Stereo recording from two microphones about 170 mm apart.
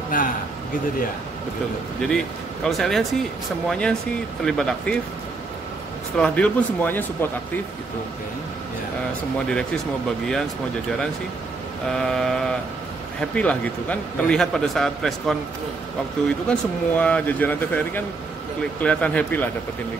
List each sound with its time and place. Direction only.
0.1 s a man's voice: 55° left (ahead or behind)
2.0 s a man's voice: 5° left (ahead or behind)
6.1 s speech: 5° left (ahead or behind)
11.9 s a man's voice: 5° left (ahead or behind)
16.4 s speech: 10° left (ahead or behind)